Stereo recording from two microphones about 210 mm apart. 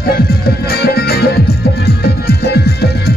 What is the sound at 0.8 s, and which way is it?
Music, 50° left (ahead or behind).